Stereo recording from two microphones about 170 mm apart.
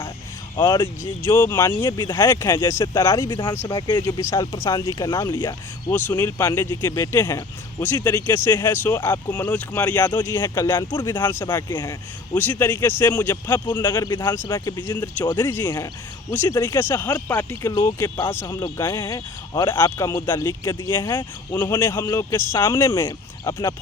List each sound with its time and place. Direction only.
0.5 s speech: 20° left (ahead or behind)
3.5 s speech: 15° left (ahead or behind)
3.8 s speech: 25° left (ahead or behind)
15.4 s speech: 10° left (ahead or behind)